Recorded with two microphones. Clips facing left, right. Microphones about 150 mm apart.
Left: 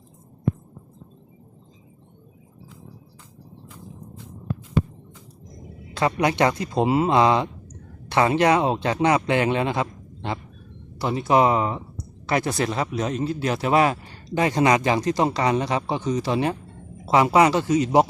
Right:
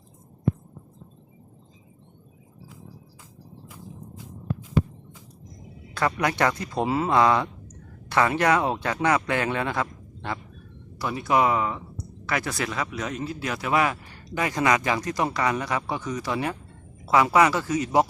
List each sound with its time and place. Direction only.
5.9 s speech: 20° left (ahead or behind)